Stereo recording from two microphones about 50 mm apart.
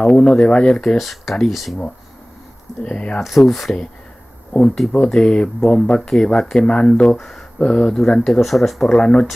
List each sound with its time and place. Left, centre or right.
0.0 s speech: centre
0.9 s speech: centre
2.8 s speech: left
3.2 s speech: centre
4.5 s speech: left
4.9 s speech: centre
7.5 s speech: centre
8.9 s speech: centre